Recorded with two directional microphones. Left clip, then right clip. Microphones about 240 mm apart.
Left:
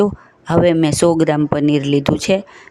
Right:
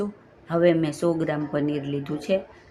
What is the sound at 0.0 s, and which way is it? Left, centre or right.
Speech, left.